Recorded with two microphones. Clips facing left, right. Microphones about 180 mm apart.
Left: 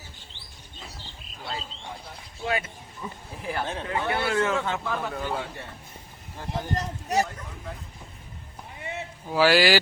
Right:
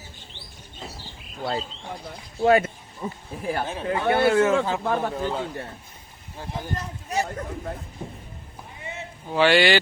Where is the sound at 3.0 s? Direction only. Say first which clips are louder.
Right 6 dB; 30° right (ahead or behind).